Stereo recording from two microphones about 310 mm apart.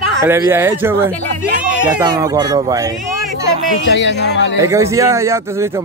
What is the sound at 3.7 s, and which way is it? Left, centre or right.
Speech, left.